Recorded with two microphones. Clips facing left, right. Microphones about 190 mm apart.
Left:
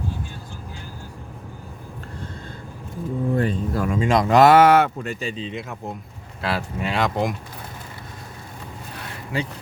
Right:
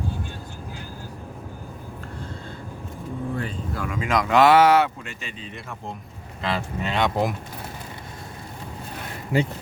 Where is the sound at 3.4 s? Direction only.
40° left (ahead or behind).